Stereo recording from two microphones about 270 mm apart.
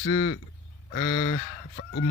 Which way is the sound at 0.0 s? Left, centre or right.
Left.